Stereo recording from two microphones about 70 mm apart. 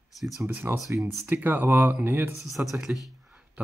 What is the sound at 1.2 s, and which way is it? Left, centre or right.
Speech, right.